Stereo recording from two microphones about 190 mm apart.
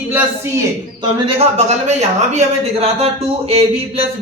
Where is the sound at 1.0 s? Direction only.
25° right (ahead or behind).